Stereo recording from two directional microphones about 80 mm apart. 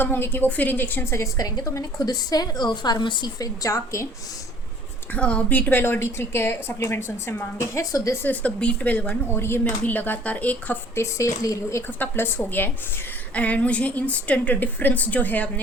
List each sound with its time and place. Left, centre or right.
0.0 s a woman's voice: left
1.1 s a woman's voice: left
3.3 s speech: left
5.1 s speech: centre
5.8 s a woman's voice: left
7.8 s speech: left
8.2 s a woman's voice: centre
10.9 s a woman's voice: left
11.9 s a woman's voice: left